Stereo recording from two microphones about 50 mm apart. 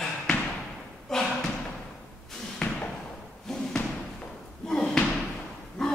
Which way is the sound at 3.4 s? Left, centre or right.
Centre.